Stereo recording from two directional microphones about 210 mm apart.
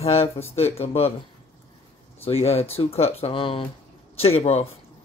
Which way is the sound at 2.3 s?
30° left (ahead or behind).